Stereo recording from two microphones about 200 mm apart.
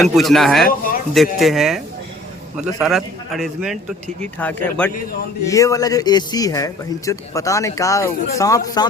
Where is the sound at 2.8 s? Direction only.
Centre (ahead or behind).